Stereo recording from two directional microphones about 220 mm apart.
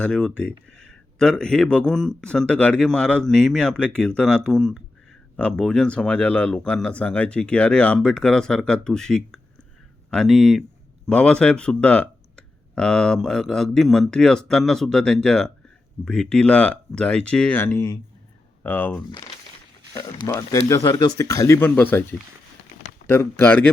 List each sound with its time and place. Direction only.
0.0 s speech: 5° left (ahead or behind)
23.0 s speech: 10° left (ahead or behind)